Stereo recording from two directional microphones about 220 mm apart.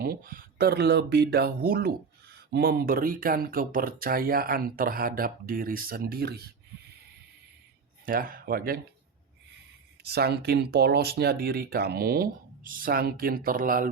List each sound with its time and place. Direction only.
0.0 s speech: 40° right (ahead or behind)
8.0 s speech: 40° right (ahead or behind)
10.0 s speech: 45° right (ahead or behind)